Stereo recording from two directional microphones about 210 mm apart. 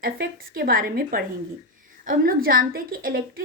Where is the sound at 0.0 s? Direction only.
45° right (ahead or behind).